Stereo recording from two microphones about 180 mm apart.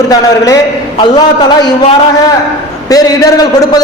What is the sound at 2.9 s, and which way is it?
Speech, 20° left (ahead or behind).